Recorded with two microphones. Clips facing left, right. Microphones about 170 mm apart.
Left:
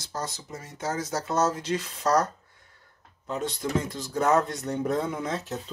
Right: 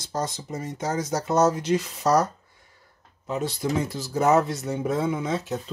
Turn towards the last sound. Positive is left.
turn(degrees=0)  # may be behind; listen again after turning